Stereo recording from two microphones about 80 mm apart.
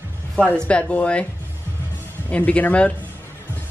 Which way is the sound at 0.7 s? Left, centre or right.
Centre.